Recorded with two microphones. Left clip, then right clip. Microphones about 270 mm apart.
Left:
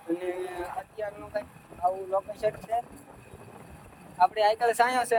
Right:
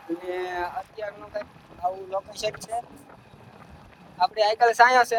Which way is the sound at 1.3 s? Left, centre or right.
Centre.